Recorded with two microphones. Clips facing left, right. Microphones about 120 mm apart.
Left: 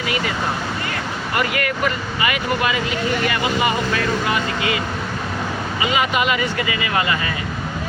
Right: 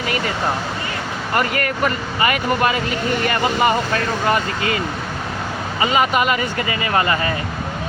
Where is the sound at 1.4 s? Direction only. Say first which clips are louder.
Right 1 dB; 40° right (ahead or behind).